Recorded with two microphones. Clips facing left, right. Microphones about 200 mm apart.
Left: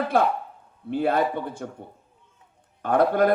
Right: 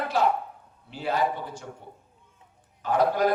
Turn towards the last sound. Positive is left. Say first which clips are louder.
# left 3 dB
turn(degrees=55)  # may be behind; listen again after turning